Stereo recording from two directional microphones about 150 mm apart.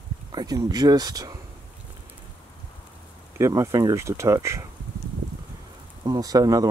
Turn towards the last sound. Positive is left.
turn(degrees=-25)  # may be behind; listen again after turning